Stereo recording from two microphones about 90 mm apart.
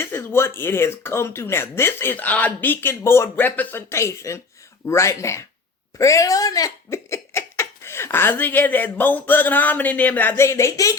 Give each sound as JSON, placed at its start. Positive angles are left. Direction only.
{"t": 0.0, "sound": "speech", "side_deg": 25}